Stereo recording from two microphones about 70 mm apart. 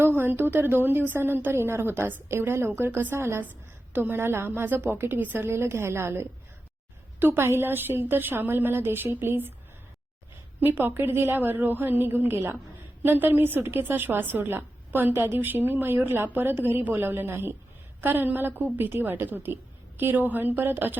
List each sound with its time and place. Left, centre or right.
0.0 s a woman's voice: right
10.6 s a woman's voice: right